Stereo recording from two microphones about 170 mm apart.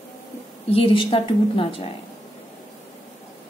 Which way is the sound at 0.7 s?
30° left (ahead or behind).